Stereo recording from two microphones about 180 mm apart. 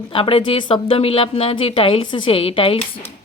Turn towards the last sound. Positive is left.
turn(degrees=30)  # may be behind; listen again after turning